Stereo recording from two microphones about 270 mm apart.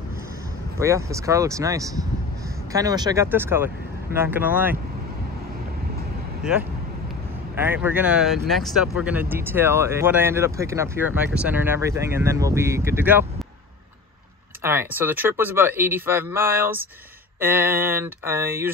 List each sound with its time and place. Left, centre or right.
0.7 s speech: centre
7.5 s speech: centre
14.6 s speech: centre